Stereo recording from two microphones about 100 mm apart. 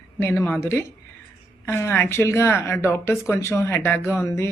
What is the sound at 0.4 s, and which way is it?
Speech, 25° left (ahead or behind).